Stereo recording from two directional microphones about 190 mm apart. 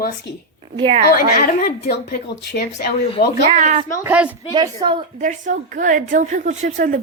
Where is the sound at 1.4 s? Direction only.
50° left (ahead or behind).